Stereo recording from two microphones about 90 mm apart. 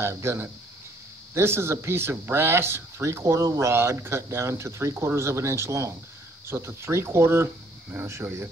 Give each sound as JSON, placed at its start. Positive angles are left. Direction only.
{"t": 0.0, "sound": "speech", "side_deg": -30}